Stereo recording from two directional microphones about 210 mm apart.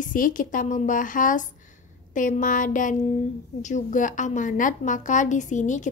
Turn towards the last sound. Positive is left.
turn(degrees=35)  # may be behind; listen again after turning